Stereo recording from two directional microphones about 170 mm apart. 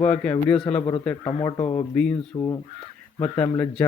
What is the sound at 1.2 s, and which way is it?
Speech, 25° left (ahead or behind).